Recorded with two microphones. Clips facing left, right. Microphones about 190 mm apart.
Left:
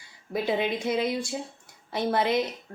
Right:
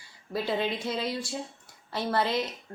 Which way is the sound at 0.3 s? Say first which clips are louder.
Left 3 dB; 15° left (ahead or behind).